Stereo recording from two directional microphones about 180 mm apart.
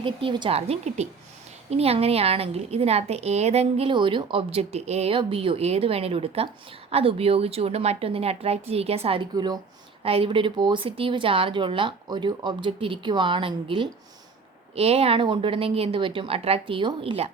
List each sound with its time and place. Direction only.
0.0 s a woman's voice: 30° right (ahead or behind)
9.3 s a woman's voice: 20° right (ahead or behind)